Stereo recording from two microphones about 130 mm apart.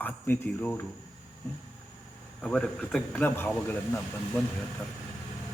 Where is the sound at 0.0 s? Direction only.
15° left (ahead or behind).